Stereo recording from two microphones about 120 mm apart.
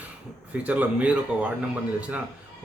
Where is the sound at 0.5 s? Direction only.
10° right (ahead or behind).